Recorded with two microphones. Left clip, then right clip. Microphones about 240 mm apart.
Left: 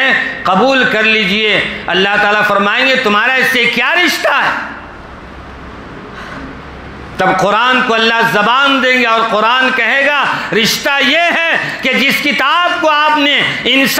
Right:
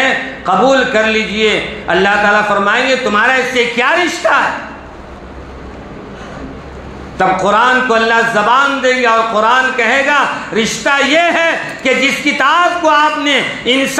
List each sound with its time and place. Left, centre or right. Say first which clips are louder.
0.0 s a man's voice: left 2 dB; left
7.2 s a man's voice: even; left